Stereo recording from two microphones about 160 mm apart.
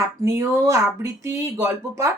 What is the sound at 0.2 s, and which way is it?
A woman's voice, 20° right (ahead or behind).